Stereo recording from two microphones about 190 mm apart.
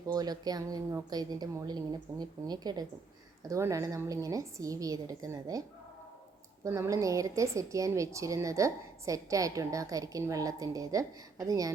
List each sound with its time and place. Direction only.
0.1 s a woman's voice: 20° right (ahead or behind)
6.7 s a woman's voice: 15° right (ahead or behind)